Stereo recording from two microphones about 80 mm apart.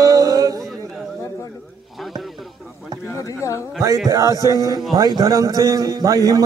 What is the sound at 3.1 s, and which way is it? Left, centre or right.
Speech, left.